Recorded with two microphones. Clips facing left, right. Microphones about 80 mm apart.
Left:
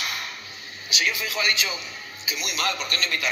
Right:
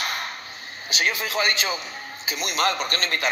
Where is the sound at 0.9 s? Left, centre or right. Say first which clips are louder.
Right 2 dB; right.